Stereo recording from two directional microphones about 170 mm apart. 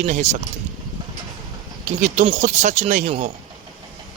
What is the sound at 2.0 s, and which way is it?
Speech, 45° right (ahead or behind).